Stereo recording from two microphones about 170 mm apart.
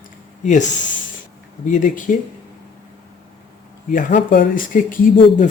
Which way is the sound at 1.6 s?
50° left (ahead or behind).